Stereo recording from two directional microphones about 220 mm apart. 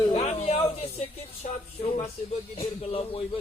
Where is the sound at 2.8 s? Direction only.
25° left (ahead or behind).